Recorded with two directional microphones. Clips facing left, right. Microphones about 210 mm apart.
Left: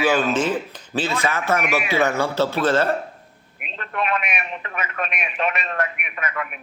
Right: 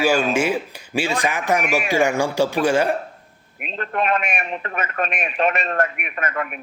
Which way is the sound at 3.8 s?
40° right (ahead or behind).